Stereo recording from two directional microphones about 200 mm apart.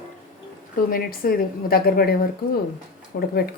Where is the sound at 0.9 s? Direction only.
45° left (ahead or behind).